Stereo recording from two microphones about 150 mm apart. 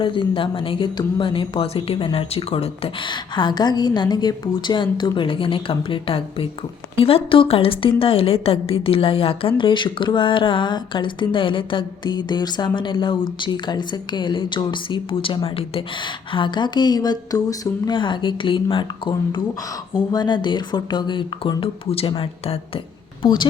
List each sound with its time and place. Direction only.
0.0 s a woman's voice: 35° left (ahead or behind)
23.2 s speech: 30° left (ahead or behind)